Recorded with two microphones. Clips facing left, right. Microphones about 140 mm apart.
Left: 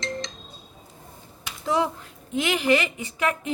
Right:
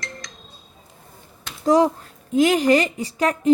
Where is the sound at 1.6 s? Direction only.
40° right (ahead or behind).